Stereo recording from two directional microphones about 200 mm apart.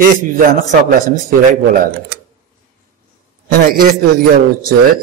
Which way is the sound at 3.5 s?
45° right (ahead or behind).